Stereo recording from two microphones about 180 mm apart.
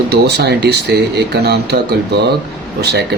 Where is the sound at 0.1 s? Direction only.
65° right (ahead or behind).